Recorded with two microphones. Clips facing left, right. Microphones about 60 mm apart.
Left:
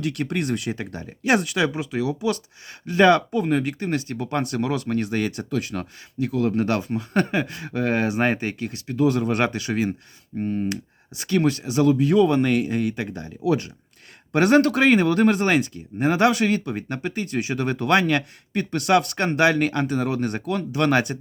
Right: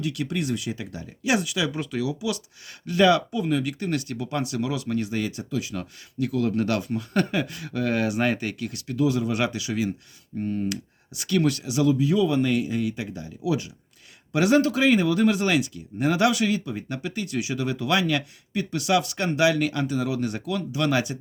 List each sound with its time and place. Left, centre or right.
0.0 s speech: left
1.7 s speech: left
2.0 s speech: left
6.1 s speech: left
9.0 s speech: left
10.4 s speech: left
16.6 s speech: left